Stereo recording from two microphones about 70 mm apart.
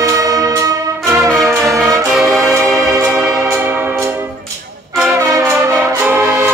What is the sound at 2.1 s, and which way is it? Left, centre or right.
Music, centre.